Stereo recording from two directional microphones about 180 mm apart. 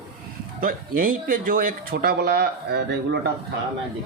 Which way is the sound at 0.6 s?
50° right (ahead or behind).